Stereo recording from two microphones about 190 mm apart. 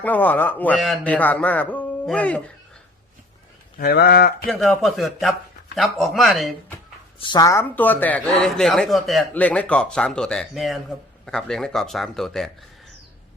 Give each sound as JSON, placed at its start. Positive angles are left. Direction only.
{"t": 0.0, "sound": "a man's voice", "side_deg": 10}
{"t": 3.8, "sound": "speech", "side_deg": 55}
{"t": 4.4, "sound": "a man's voice", "side_deg": 0}
{"t": 7.2, "sound": "a man's voice", "side_deg": 20}